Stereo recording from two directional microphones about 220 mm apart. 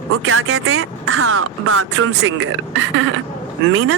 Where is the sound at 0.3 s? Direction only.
70° right (ahead or behind).